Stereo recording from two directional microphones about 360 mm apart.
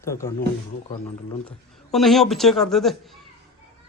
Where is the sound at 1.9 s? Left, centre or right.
Centre.